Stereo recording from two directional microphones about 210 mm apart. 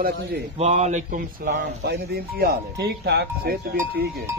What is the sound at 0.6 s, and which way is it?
Speech, 30° right (ahead or behind).